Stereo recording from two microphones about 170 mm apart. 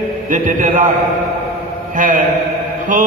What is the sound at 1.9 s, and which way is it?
A man's voice, 50° right (ahead or behind).